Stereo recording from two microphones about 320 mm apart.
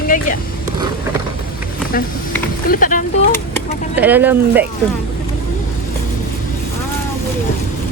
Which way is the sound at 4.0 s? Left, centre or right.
Centre.